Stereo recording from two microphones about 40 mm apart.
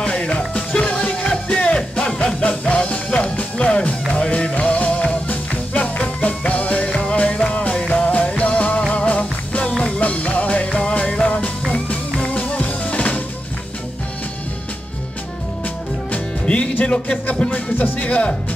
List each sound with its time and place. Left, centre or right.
0.0 s music: left
16.1 s music: left
16.8 s speech: left
17.5 s music: left
18.0 s speech: left